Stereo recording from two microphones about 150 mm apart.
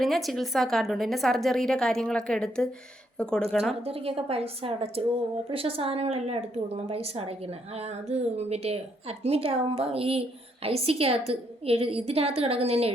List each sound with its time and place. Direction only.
0.0 s a woman's voice: centre (ahead or behind)
3.8 s speech: 40° right (ahead or behind)